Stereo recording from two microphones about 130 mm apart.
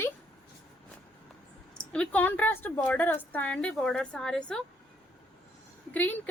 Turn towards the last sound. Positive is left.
turn(degrees=10)  # may be behind; listen again after turning